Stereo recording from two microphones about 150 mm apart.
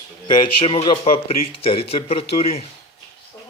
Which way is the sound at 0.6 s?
35° left (ahead or behind).